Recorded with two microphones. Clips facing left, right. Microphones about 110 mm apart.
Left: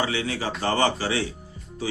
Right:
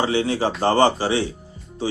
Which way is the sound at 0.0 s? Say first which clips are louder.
Right 6 dB; 30° right (ahead or behind).